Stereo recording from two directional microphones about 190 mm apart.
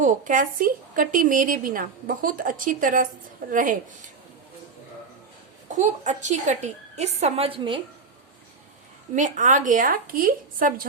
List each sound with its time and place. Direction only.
0.0 s speech: 40° right (ahead or behind)
5.6 s a woman's voice: 40° right (ahead or behind)
9.1 s speech: 40° right (ahead or behind)